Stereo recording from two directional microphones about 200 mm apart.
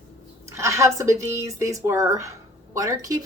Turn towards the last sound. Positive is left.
turn(degrees=-15)  # may be behind; listen again after turning